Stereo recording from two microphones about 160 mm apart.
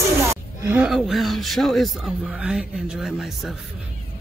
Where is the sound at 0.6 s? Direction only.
15° right (ahead or behind).